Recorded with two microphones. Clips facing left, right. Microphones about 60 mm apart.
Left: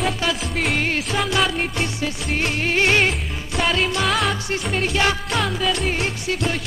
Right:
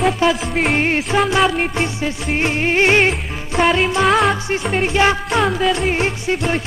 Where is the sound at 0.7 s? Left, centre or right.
Right.